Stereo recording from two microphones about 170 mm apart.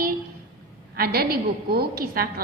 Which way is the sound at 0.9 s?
65° right (ahead or behind).